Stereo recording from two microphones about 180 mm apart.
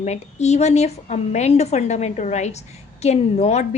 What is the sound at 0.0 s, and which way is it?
A woman's voice, 40° left (ahead or behind).